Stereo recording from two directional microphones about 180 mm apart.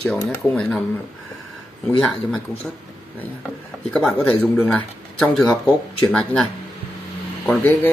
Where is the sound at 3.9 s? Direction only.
5° left (ahead or behind).